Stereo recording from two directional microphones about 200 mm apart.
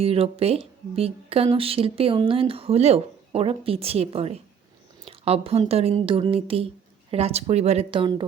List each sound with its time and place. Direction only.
0.0 s a woman's voice: 30° right (ahead or behind)